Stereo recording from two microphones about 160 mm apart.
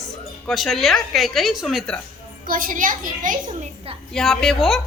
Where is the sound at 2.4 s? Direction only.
60° right (ahead or behind).